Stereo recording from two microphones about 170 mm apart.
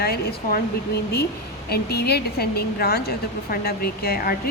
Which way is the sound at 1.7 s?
70° left (ahead or behind).